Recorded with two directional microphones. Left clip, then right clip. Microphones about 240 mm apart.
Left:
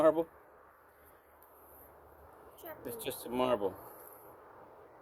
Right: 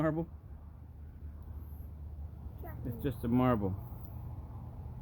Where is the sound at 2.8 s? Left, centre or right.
Centre.